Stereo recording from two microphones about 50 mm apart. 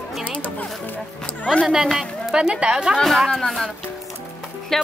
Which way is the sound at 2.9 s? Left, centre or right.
Centre.